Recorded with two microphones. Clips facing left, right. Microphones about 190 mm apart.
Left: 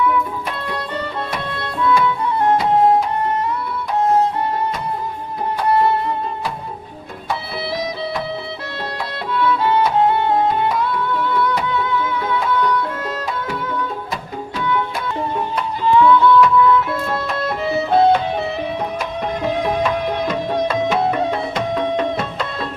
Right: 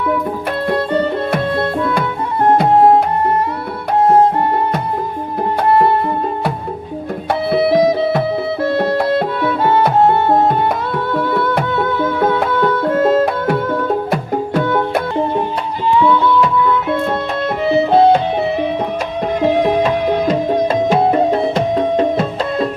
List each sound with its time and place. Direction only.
0.7 s music: 50° right (ahead or behind)
5.7 s music: 50° right (ahead or behind)
7.5 s music: 55° right (ahead or behind)
16.0 s music: 25° right (ahead or behind)
17.7 s music: 25° right (ahead or behind)
19.6 s music: 35° right (ahead or behind)